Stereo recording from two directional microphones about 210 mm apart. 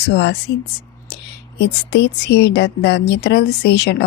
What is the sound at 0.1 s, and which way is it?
Speech, 55° left (ahead or behind).